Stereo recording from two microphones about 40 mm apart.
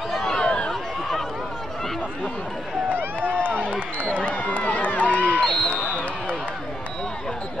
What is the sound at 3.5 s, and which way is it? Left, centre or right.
Run, left.